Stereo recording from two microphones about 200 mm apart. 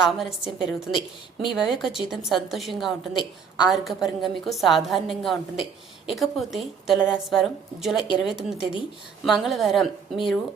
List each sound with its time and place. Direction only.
0.0 s a woman's voice: centre (ahead or behind)
7.9 s speech: 25° left (ahead or behind)
8.2 s a woman's voice: centre (ahead or behind)